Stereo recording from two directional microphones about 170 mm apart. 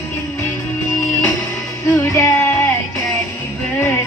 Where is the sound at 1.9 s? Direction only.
15° left (ahead or behind).